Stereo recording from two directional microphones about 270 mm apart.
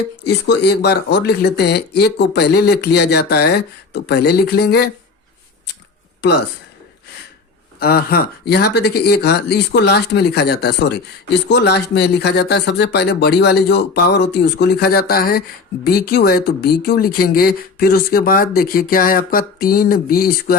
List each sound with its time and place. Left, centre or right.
0.3 s speech: left
7.8 s speech: left